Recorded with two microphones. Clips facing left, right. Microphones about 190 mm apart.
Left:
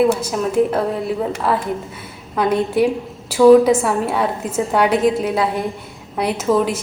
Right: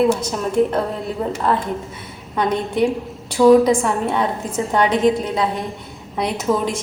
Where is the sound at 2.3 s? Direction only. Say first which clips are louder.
Left 3 dB; 5° left (ahead or behind).